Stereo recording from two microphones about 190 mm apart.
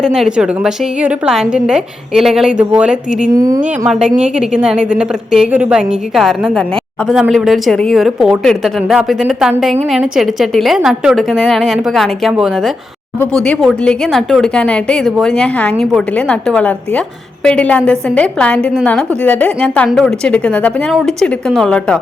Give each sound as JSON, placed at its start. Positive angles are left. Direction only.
{"t": 0.0, "sound": "a woman's voice", "side_deg": -5}
{"t": 3.3, "sound": "a woman's voice", "side_deg": -15}
{"t": 3.6, "sound": "a woman's voice", "side_deg": -5}